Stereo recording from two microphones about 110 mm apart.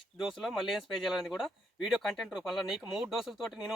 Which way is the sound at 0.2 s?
Centre (ahead or behind).